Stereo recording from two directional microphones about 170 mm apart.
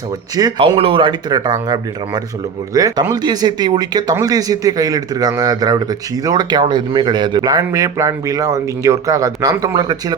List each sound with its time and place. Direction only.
0.3 s speech: 20° right (ahead or behind)
0.6 s speech: 35° right (ahead or behind)